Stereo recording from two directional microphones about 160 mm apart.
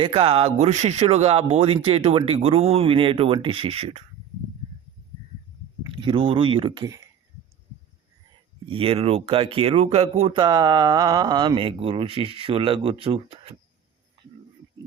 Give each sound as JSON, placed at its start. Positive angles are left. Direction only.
{"t": 0.0, "sound": "speech", "side_deg": -35}
{"t": 5.9, "sound": "speech", "side_deg": -30}
{"t": 8.6, "sound": "speech", "side_deg": -35}